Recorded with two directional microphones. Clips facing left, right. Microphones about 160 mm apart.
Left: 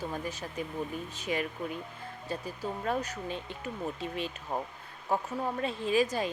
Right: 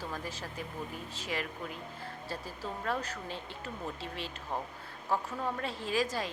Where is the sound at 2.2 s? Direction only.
15° left (ahead or behind).